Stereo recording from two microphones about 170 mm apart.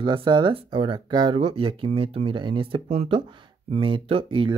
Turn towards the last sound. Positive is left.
turn(degrees=-30)  # may be behind; listen again after turning